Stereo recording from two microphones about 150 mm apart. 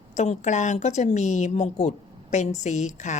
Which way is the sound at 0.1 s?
50° left (ahead or behind).